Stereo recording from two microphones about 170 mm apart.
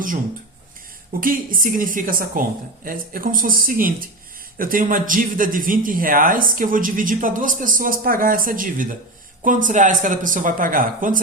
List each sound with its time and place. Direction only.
1.2 s speech: 55° right (ahead or behind)